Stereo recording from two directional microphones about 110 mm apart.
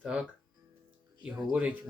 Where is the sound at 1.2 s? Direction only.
10° right (ahead or behind).